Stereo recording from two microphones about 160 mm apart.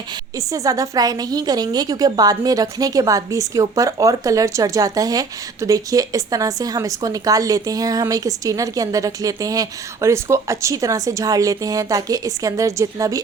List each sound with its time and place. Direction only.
0.3 s a woman's voice: 20° right (ahead or behind)